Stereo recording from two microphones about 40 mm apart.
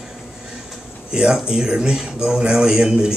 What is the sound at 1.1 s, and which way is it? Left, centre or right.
Speech, centre.